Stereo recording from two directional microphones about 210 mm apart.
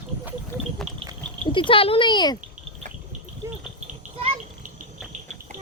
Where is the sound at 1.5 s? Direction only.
25° left (ahead or behind).